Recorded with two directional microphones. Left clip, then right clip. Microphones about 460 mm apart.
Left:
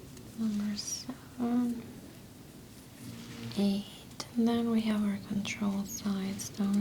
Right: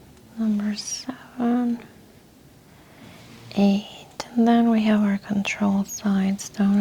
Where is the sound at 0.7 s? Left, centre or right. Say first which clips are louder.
Right 7 dB; right.